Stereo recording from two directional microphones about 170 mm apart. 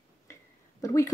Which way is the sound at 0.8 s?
20° left (ahead or behind).